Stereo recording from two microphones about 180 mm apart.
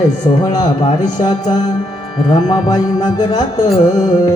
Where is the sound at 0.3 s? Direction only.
25° left (ahead or behind).